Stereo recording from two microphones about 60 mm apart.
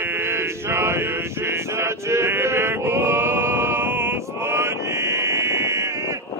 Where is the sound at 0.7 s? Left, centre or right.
Right.